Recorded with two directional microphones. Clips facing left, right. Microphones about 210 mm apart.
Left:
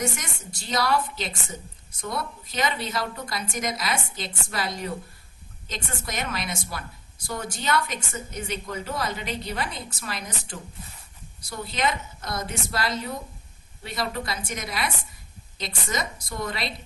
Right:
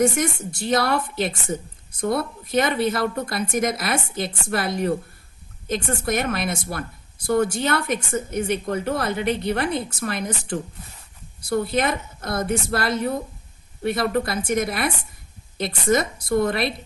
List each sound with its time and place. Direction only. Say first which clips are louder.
0.0 s a woman's voice: right 11 dB; 55° right (ahead or behind)